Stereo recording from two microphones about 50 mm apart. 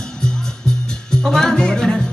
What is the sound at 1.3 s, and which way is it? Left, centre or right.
Music, centre.